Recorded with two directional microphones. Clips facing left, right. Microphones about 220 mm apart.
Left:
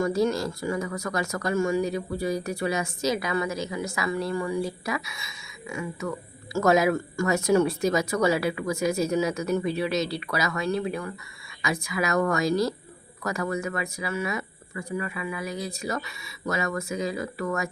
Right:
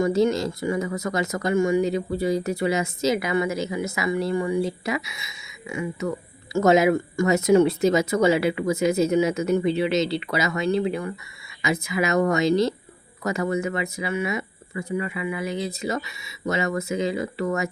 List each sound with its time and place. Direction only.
0.0 s speech: 20° right (ahead or behind)